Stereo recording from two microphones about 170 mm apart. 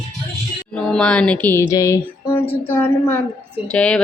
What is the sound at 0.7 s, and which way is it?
Speech, 5° left (ahead or behind).